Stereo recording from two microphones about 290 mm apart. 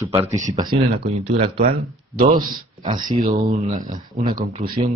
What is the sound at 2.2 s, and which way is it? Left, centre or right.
Speech, right.